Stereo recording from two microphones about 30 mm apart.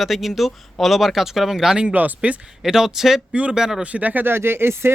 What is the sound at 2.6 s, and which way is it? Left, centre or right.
Speech, centre.